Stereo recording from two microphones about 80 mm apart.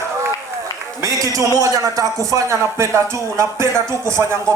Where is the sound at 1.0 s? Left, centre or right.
Right.